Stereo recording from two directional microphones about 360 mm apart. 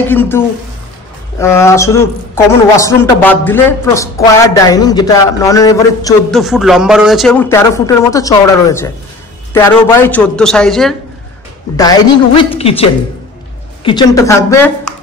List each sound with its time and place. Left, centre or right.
0.1 s a man's voice: centre
1.4 s a man's voice: centre
6.4 s a man's voice: centre
13.8 s a man's voice: centre